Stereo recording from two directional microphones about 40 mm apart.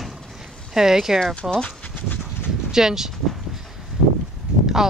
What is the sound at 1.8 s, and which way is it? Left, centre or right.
Dog, left.